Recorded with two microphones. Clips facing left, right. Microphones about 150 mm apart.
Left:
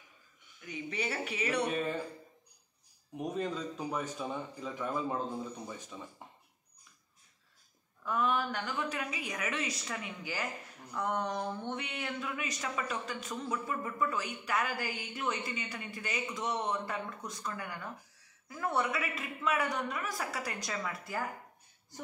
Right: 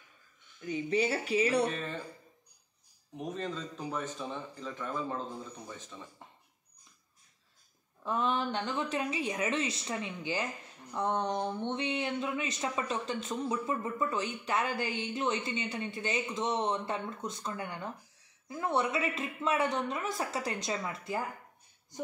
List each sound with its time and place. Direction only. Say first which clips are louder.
0.6 s speech: right 8 dB; 35° right (ahead or behind)
1.7 s a man's voice: left 4 dB; 10° left (ahead or behind)
3.3 s a man's voice: left 4 dB; 10° left (ahead or behind)
8.0 s speech: right 1 dB; 30° right (ahead or behind)